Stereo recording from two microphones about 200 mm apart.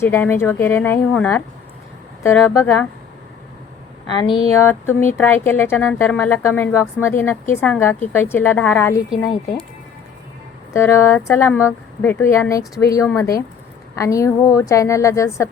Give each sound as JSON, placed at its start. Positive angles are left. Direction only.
{"t": 0.0, "sound": "speech", "side_deg": 10}
{"t": 4.5, "sound": "speech", "side_deg": 10}
{"t": 10.8, "sound": "speech", "side_deg": 10}